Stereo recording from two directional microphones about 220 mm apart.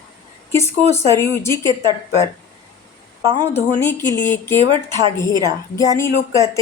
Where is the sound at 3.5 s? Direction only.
10° left (ahead or behind).